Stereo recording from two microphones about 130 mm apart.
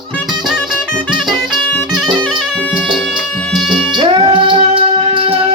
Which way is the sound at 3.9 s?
40° right (ahead or behind).